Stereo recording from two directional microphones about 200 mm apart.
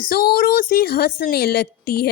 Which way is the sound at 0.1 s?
50° left (ahead or behind).